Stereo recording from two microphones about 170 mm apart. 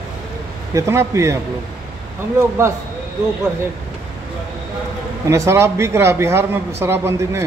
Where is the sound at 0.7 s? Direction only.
15° right (ahead or behind).